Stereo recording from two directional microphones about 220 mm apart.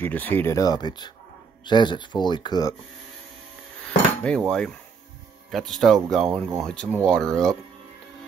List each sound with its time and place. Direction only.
0.0 s speech: 10° left (ahead or behind)
4.2 s cutlery: 5° left (ahead or behind)